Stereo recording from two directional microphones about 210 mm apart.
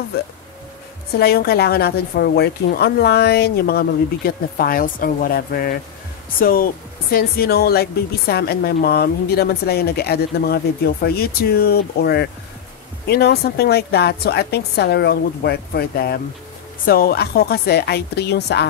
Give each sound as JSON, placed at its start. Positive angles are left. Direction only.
{"t": 1.1, "sound": "speech", "side_deg": 50}